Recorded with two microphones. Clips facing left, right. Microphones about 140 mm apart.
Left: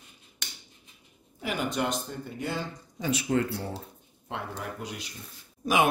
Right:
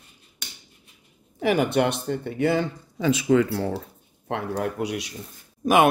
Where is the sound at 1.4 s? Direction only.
65° right (ahead or behind).